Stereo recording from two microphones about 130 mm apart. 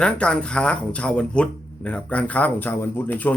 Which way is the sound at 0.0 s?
10° left (ahead or behind).